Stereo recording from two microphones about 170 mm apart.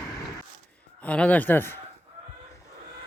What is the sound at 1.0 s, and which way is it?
Speech, 5° left (ahead or behind).